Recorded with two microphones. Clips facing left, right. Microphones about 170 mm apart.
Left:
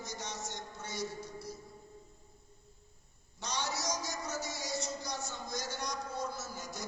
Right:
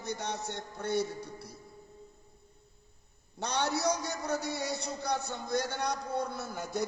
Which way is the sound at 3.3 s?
60° right (ahead or behind).